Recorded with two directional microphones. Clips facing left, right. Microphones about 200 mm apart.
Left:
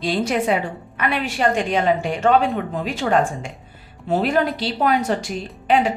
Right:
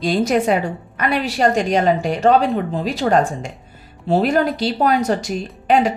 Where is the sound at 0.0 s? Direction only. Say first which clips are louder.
Right 4 dB; 45° right (ahead or behind).